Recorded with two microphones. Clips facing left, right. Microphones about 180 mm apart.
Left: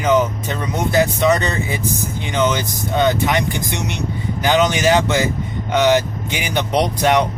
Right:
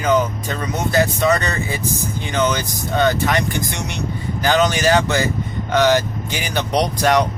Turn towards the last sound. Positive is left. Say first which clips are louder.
# left 1 dB
turn(degrees=20)  # may be behind; listen again after turning